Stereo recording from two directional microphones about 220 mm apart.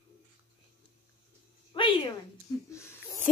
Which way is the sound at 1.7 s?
20° left (ahead or behind).